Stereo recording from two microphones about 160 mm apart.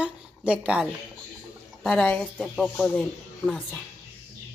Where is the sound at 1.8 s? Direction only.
5° left (ahead or behind).